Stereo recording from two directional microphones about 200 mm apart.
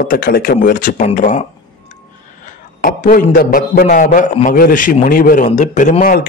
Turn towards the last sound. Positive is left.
turn(degrees=40)  # may be behind; listen again after turning